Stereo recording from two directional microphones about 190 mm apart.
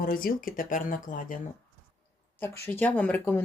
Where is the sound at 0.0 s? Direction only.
50° left (ahead or behind).